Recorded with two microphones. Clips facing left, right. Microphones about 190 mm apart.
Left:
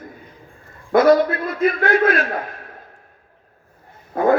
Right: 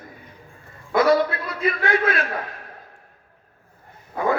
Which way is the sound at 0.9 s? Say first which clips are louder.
Left 5 dB; 50° left (ahead or behind).